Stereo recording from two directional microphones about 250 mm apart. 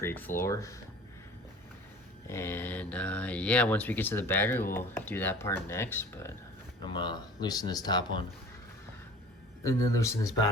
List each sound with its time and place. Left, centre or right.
0.0 s speech: centre
2.2 s speech: centre
9.6 s speech: centre